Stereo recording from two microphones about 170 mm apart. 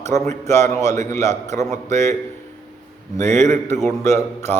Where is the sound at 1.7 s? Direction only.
45° right (ahead or behind).